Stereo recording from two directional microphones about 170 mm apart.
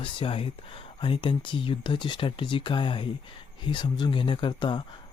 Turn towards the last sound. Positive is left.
turn(degrees=25)  # may be behind; listen again after turning